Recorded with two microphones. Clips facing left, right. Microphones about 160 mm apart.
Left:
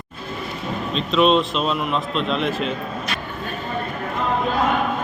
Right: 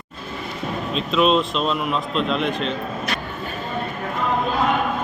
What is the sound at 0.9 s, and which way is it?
A man's voice, centre (ahead or behind).